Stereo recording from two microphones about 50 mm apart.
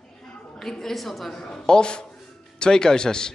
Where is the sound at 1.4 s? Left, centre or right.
Centre.